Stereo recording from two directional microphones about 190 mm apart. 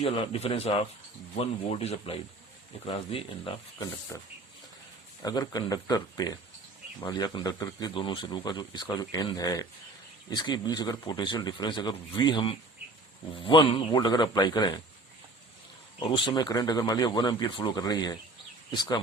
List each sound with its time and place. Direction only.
0.0 s speech: 30° left (ahead or behind)
4.1 s speech: 15° left (ahead or behind)
16.0 s speech: 25° left (ahead or behind)